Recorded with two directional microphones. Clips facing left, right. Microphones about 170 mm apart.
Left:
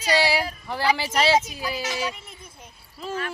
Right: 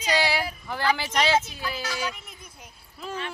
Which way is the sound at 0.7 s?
5° left (ahead or behind).